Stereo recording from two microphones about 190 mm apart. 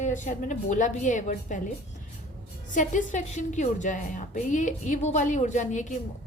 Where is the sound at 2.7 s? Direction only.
40° left (ahead or behind).